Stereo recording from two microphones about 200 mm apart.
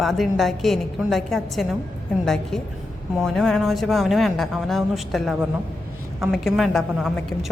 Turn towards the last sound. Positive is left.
turn(degrees=0)  # may be behind; listen again after turning